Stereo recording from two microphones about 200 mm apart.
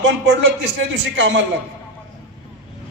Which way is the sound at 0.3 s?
65° right (ahead or behind).